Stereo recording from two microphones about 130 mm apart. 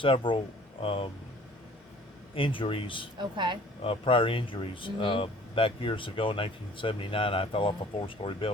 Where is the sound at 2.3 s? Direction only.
40° left (ahead or behind).